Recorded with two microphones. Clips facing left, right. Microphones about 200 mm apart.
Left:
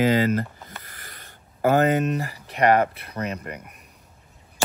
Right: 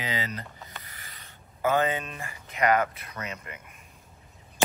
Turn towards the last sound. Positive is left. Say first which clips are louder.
# left 8 dB
turn(degrees=35)  # may be behind; listen again after turning